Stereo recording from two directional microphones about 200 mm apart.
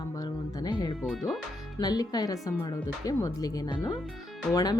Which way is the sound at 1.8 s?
20° left (ahead or behind).